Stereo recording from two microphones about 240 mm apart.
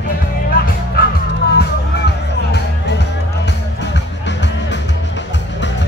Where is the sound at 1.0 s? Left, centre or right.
Left.